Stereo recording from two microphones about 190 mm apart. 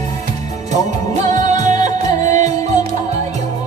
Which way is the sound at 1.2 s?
35° right (ahead or behind).